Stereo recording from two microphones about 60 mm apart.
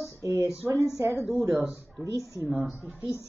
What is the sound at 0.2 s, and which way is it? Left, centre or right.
A woman's voice, right.